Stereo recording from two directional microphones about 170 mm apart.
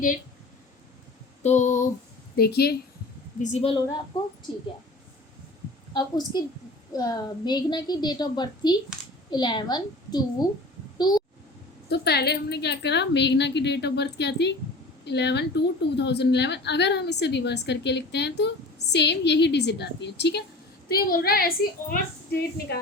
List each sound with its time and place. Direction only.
1.4 s a sound: 45° left (ahead or behind)
2.3 s a woman's voice: 65° left (ahead or behind)
3.4 s a woman's voice: 40° left (ahead or behind)
5.9 s a woman's voice: 25° left (ahead or behind)
10.9 s a sound: 25° left (ahead or behind)
11.9 s a woman's voice: 70° left (ahead or behind)
20.8 s a woman's voice: 60° left (ahead or behind)